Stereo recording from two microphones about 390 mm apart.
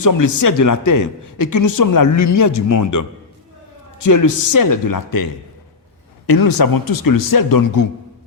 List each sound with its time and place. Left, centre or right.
0.0 s a man's voice: left